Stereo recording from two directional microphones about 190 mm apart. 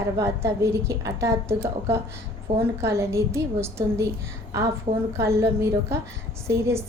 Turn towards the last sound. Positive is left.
turn(degrees=-15)  # may be behind; listen again after turning